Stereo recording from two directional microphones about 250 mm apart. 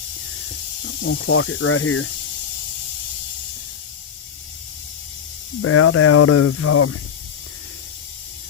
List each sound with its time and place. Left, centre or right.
0.9 s speech: left
5.6 s speech: left